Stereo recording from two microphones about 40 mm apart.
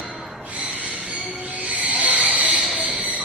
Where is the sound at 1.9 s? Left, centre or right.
Right.